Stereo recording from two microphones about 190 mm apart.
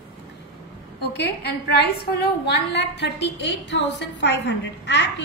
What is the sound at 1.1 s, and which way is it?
A woman's voice, 60° left (ahead or behind).